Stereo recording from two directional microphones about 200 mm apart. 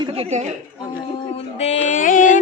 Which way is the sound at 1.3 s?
35° left (ahead or behind).